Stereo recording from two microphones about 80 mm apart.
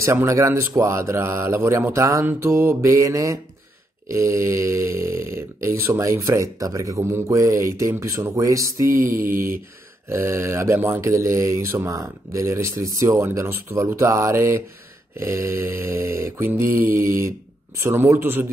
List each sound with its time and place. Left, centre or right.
0.0 s speech: right